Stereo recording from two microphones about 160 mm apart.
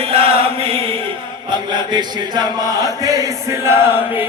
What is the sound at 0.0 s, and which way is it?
Chant, 35° right (ahead or behind).